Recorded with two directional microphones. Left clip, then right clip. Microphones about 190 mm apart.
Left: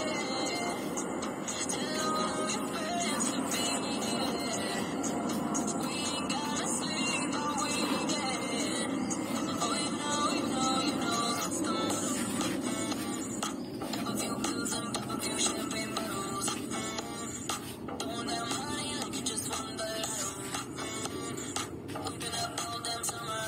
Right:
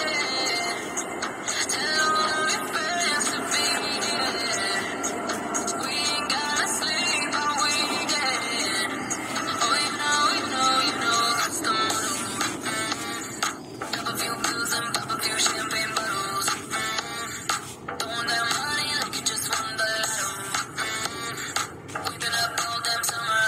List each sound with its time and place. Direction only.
2.0 s music: 20° right (ahead or behind)
6.3 s music: 20° right (ahead or behind)
9.5 s music: 20° right (ahead or behind)
15.4 s music: 20° right (ahead or behind)
18.2 s music: 20° right (ahead or behind)
22.3 s music: 20° right (ahead or behind)